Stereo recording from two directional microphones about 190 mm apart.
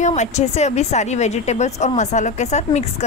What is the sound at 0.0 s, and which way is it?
A woman's voice, 40° left (ahead or behind).